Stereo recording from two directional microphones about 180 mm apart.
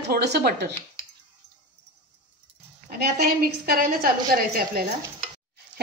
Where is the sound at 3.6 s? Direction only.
55° right (ahead or behind).